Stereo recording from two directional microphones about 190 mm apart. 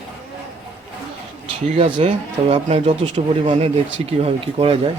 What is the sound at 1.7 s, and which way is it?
A man's voice, 30° right (ahead or behind).